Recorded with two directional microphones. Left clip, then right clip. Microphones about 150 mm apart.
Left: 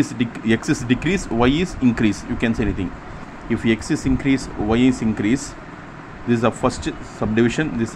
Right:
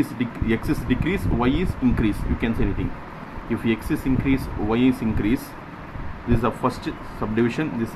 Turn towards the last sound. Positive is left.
turn(degrees=30)  # may be behind; listen again after turning